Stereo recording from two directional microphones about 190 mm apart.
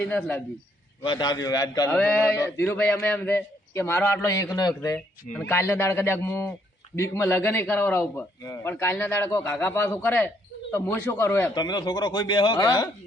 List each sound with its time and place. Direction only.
0.0 s a man's voice: 10° left (ahead or behind)
1.0 s speech: 25° left (ahead or behind)
1.9 s a man's voice: 5° left (ahead or behind)
11.5 s speech: 20° left (ahead or behind)